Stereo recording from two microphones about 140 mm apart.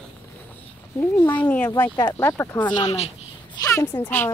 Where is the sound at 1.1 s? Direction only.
25° left (ahead or behind).